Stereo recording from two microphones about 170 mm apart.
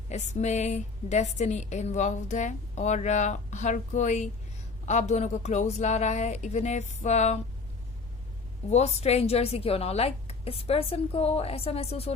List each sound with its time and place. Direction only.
0.1 s a woman's voice: 40° left (ahead or behind)
8.7 s a woman's voice: 40° left (ahead or behind)